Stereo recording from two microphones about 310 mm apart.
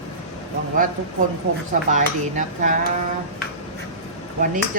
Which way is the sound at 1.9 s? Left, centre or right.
Right.